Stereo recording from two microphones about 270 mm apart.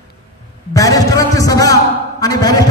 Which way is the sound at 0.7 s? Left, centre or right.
Centre.